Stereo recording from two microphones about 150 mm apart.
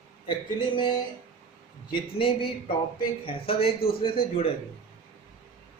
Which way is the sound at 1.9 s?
35° left (ahead or behind).